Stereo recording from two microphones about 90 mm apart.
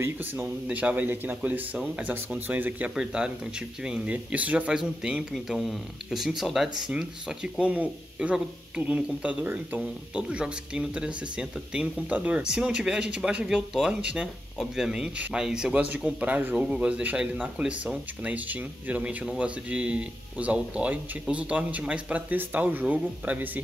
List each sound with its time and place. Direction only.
0.0 s a man's voice: 25° right (ahead or behind)
2.9 s speech: 10° right (ahead or behind)